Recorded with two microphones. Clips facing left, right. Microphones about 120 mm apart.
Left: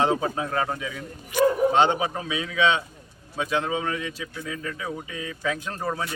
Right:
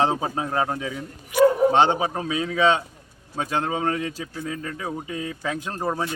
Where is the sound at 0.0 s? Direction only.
30° right (ahead or behind).